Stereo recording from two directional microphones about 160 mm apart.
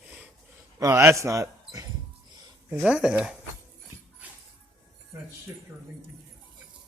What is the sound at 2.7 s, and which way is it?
Speech, 5° right (ahead or behind).